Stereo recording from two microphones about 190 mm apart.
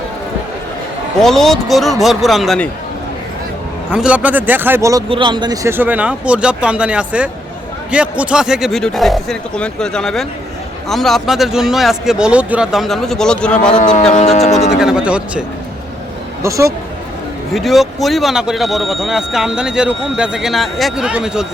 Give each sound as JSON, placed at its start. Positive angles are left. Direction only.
{"t": 1.2, "sound": "speech", "side_deg": 0}
{"t": 3.9, "sound": "speech", "side_deg": -5}
{"t": 5.0, "sound": "speech", "side_deg": -25}
{"t": 13.7, "sound": "speech", "side_deg": 40}
{"t": 14.7, "sound": "speech", "side_deg": -5}
{"t": 16.4, "sound": "speech", "side_deg": -15}
{"t": 17.5, "sound": "speech", "side_deg": 0}